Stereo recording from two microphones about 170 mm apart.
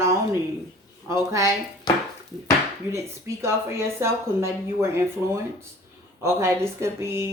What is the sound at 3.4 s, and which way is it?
A woman's voice, 15° right (ahead or behind).